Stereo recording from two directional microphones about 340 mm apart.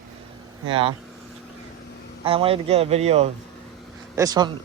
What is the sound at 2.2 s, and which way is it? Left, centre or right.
A man's voice, centre.